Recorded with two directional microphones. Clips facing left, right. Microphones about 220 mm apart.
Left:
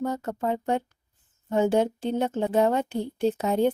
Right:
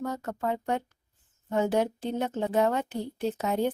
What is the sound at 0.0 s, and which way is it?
A woman's voice, 25° left (ahead or behind).